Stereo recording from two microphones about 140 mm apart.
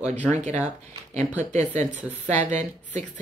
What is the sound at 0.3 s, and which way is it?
A woman's voice, 55° right (ahead or behind).